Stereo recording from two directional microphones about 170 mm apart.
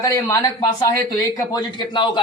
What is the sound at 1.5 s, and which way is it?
Speech, 25° left (ahead or behind).